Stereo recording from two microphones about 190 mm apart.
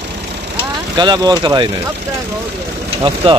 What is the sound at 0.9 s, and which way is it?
Speech, 25° right (ahead or behind).